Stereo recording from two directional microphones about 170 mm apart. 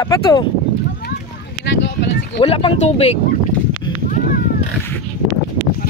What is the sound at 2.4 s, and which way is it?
Speech, 35° left (ahead or behind).